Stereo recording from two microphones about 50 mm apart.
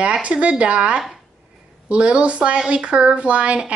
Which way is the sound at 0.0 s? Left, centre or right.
Centre.